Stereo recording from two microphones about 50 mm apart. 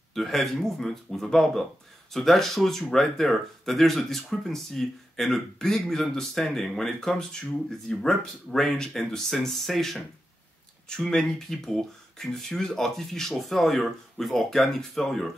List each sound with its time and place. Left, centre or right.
0.1 s speech: centre